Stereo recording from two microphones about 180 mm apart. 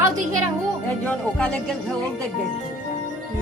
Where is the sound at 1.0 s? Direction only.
5° left (ahead or behind).